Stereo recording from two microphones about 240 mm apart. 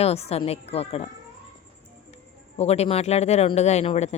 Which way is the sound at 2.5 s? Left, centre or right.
Left.